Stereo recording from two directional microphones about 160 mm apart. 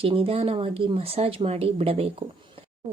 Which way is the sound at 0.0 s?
35° right (ahead or behind).